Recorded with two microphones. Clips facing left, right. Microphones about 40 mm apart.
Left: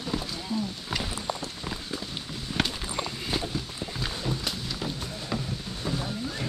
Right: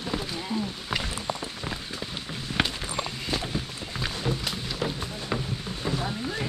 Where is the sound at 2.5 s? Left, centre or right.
Right.